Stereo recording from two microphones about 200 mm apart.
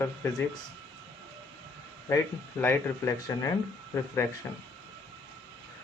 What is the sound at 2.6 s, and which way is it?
Speech, 15° left (ahead or behind).